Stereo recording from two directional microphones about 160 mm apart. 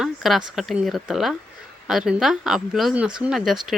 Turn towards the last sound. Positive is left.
turn(degrees=0)  # may be behind; listen again after turning